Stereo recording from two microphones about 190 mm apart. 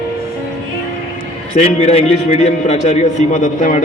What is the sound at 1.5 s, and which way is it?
A man's voice, 35° left (ahead or behind).